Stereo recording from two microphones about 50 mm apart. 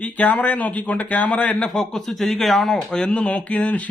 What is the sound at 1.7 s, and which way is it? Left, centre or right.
Speech, centre.